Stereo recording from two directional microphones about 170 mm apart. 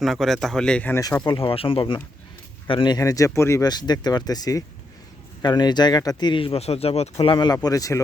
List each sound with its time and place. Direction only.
0.0 s speech: centre (ahead or behind)
1.3 s speech: 30° left (ahead or behind)